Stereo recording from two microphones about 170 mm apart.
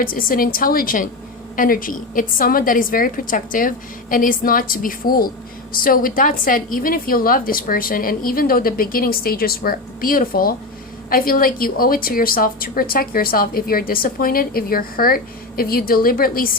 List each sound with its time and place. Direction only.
0.0 s a woman's voice: 55° left (ahead or behind)